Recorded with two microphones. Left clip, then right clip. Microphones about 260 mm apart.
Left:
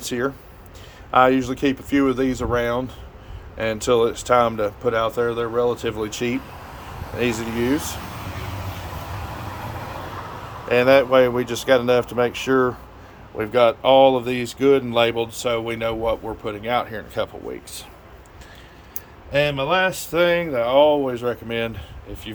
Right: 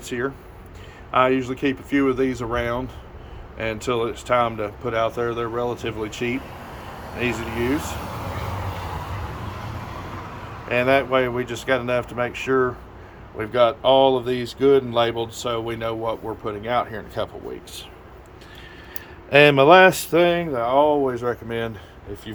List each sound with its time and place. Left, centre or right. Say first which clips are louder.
0.0 s speech: left 2 dB; centre
6.5 s a sound: right 1 dB; right
7.2 s speech: left 2 dB; centre
10.7 s speech: left 4 dB; centre
19.3 s a man's voice: right 8 dB; centre
20.1 s speech: even; centre